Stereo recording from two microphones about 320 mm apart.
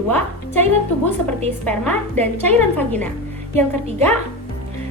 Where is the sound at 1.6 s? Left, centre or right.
Centre.